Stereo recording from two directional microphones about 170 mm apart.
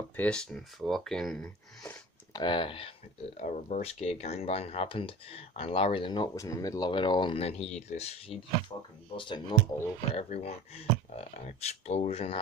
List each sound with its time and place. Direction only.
0.1 s speech: 5° left (ahead or behind)
2.3 s speech: 25° left (ahead or behind)
3.3 s speech: 45° left (ahead or behind)
8.7 s speech: 30° left (ahead or behind)